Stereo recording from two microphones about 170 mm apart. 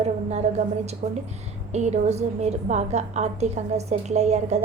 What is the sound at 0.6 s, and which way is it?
A woman's voice, 40° right (ahead or behind).